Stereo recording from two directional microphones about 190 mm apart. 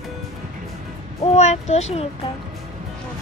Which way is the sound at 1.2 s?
35° left (ahead or behind).